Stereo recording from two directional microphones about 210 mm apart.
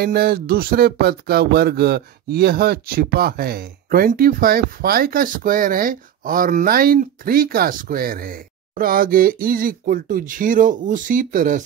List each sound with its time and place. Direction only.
0.0 s speech: 50° right (ahead or behind)